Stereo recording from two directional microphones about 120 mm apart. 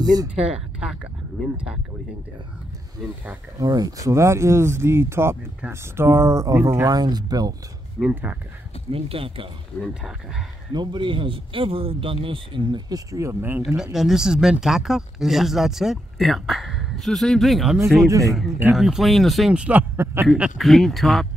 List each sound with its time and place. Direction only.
0.0 s speech: 30° right (ahead or behind)
0.3 s speech: 10° right (ahead or behind)
3.5 s speech: 30° right (ahead or behind)
8.0 s speech: 15° right (ahead or behind)
8.9 s speech: 50° right (ahead or behind)
10.7 s speech: 40° right (ahead or behind); by 13.6 s 20° right (ahead or behind)
13.9 s speech: 5° right (ahead or behind)
18.0 s speech: 30° right (ahead or behind)
18.7 s speech: 5° right (ahead or behind)
20.3 s speech: 5° right (ahead or behind)